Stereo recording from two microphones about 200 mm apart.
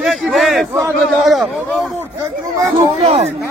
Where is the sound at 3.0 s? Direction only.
35° right (ahead or behind).